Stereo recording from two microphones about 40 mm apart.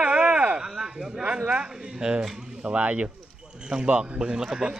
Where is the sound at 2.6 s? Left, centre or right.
Right.